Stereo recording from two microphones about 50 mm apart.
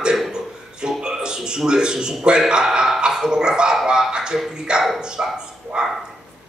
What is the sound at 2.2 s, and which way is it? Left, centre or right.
Speech, centre.